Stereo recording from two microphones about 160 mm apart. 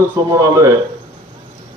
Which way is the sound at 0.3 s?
20° right (ahead or behind).